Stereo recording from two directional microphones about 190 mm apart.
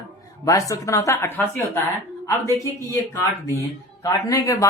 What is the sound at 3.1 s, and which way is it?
A woman's voice, 15° left (ahead or behind).